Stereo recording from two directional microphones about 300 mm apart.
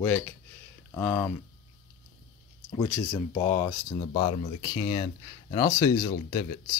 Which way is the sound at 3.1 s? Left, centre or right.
Centre.